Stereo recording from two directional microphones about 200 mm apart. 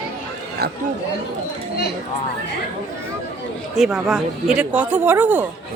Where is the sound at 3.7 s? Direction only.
Centre (ahead or behind).